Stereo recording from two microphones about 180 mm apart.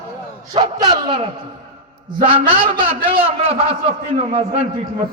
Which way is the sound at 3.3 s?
35° right (ahead or behind).